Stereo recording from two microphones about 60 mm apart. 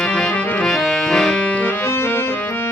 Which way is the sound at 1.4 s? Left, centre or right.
Left.